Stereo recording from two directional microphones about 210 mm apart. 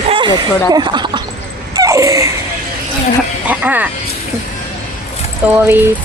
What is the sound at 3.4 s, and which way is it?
Speech, 10° right (ahead or behind).